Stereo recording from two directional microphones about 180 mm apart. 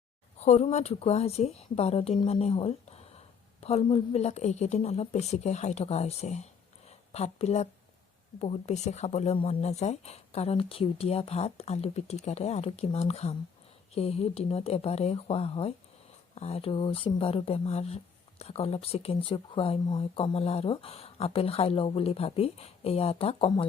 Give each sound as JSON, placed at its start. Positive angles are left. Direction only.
{"t": 0.3, "sound": "speech", "side_deg": 40}